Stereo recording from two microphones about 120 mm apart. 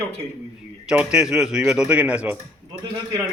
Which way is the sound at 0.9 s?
10° right (ahead or behind).